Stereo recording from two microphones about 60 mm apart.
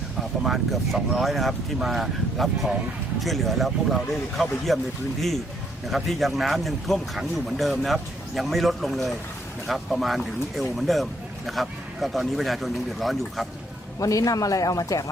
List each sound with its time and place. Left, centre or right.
0.4 s speech: centre
5.9 s speech: centre
14.0 s speech: left